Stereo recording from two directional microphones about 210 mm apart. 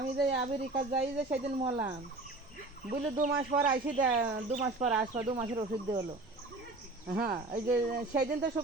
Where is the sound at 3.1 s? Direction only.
35° right (ahead or behind).